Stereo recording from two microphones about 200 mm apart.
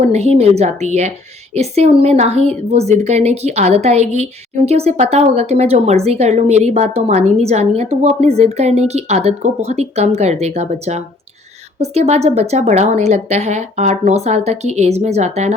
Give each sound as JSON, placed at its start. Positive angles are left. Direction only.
{"t": 0.0, "sound": "a woman's voice", "side_deg": -30}